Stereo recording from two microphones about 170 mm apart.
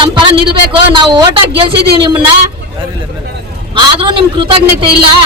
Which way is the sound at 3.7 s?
30° right (ahead or behind).